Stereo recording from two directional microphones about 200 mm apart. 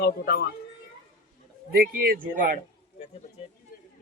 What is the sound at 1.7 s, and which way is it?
Speech, 50° right (ahead or behind).